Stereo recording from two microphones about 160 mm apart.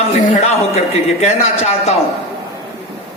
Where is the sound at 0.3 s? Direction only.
40° left (ahead or behind).